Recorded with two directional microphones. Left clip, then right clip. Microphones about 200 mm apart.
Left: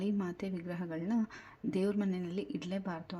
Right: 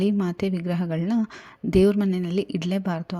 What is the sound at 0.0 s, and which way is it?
A woman's voice, 35° right (ahead or behind).